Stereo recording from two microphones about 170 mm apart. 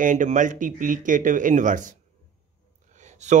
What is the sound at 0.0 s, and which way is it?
Speech, 50° right (ahead or behind).